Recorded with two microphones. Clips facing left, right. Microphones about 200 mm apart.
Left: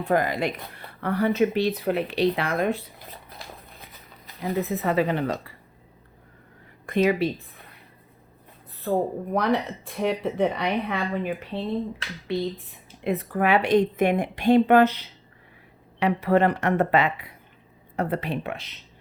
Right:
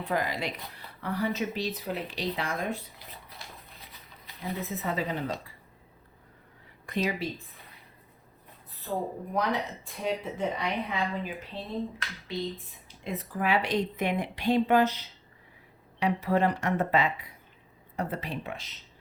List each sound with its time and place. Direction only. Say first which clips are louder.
0.0 s speech: left 7 dB; 50° left (ahead or behind)
4.4 s speech: left 8 dB; 65° left (ahead or behind)
6.8 s speech: left 9 dB; 55° left (ahead or behind)
8.9 s speech: left 8 dB; 60° left (ahead or behind)